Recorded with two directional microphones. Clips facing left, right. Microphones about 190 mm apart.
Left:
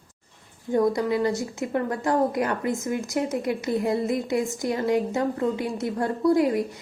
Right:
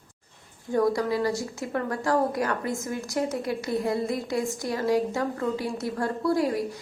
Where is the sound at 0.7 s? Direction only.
20° left (ahead or behind).